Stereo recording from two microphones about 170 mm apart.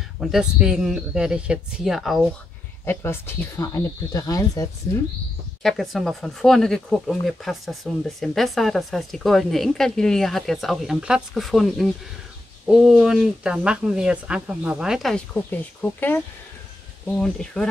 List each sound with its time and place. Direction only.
0.2 s speech: 5° right (ahead or behind)
2.8 s speech: 15° left (ahead or behind)
5.6 s speech: centre (ahead or behind)